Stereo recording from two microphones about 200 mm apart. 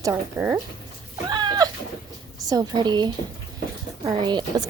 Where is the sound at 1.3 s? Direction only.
20° right (ahead or behind).